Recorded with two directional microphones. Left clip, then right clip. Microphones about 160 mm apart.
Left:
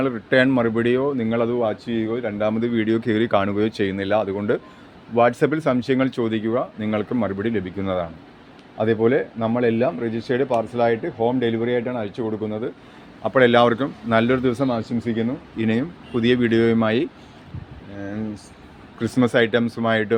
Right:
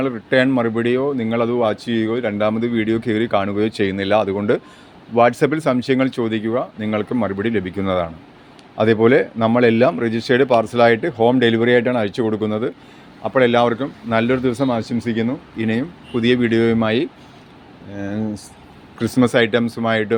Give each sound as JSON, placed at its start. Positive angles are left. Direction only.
{"t": 0.0, "sound": "speech", "side_deg": -5}
{"t": 1.5, "sound": "speech", "side_deg": -30}
{"t": 2.4, "sound": "speech", "side_deg": -15}
{"t": 8.8, "sound": "speech", "side_deg": -35}
{"t": 13.2, "sound": "a man's voice", "side_deg": -5}
{"t": 14.8, "sound": "speech", "side_deg": -25}
{"t": 15.5, "sound": "speech", "side_deg": -5}
{"t": 17.9, "sound": "speech", "side_deg": -25}